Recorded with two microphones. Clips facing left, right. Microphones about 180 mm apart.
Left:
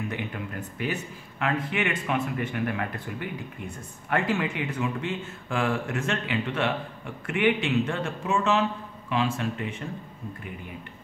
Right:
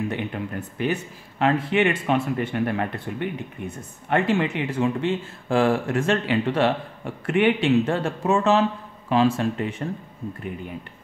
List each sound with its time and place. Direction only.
0.1 s speech: 30° right (ahead or behind); by 10.0 s 45° right (ahead or behind)